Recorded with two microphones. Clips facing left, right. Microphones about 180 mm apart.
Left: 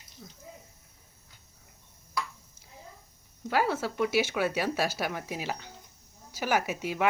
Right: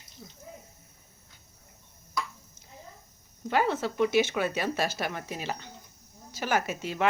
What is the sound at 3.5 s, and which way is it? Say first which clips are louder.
Speech: right 1 dB; 5° left (ahead or behind).